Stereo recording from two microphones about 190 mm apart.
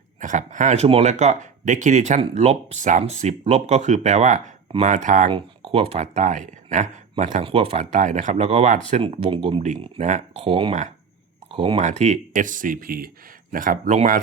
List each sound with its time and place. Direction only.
0.2 s speech: 40° right (ahead or behind)
5.3 s speech: 25° right (ahead or behind)
7.4 s speech: 30° right (ahead or behind)
9.6 s speech: 40° right (ahead or behind)
10.4 s speech: 30° right (ahead or behind)
11.8 s speech: 40° right (ahead or behind)